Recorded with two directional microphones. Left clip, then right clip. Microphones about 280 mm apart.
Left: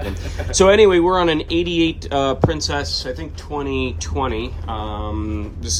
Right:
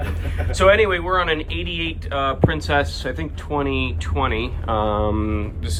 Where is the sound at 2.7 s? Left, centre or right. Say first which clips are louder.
Right 2 dB; centre.